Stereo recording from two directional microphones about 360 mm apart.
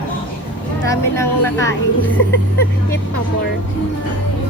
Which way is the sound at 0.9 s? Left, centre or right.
Centre.